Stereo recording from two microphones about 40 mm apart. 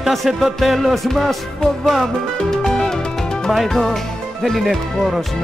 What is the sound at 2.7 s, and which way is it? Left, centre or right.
Music, centre.